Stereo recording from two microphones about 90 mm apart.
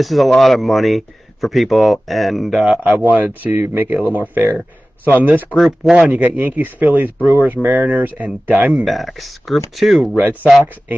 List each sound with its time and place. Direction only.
0.0 s speech: centre (ahead or behind)
2.9 s speech: 20° right (ahead or behind)
5.6 s speech: 5° right (ahead or behind)
6.1 s speech: 20° right (ahead or behind)
8.7 s speech: centre (ahead or behind)
10.1 s speech: 20° right (ahead or behind)